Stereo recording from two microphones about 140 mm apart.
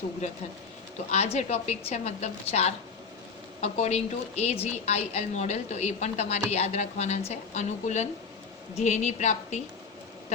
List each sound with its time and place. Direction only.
1.1 s a woman's voice: 50° left (ahead or behind)